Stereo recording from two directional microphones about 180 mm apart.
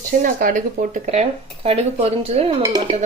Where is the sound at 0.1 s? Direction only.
50° right (ahead or behind); by 2.6 s 35° right (ahead or behind).